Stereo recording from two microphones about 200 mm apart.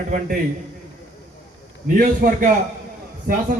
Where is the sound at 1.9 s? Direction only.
40° right (ahead or behind).